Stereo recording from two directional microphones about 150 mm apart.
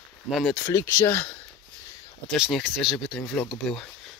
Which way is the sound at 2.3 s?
Centre (ahead or behind).